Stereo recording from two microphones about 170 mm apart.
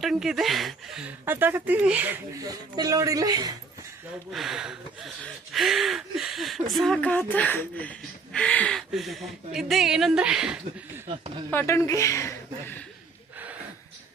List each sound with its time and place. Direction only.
0.0 s speech: centre (ahead or behind)
1.2 s speech: 10° right (ahead or behind)
2.4 s speech: 20° right (ahead or behind)
4.3 s speech: centre (ahead or behind)
11.5 s speech: 15° left (ahead or behind)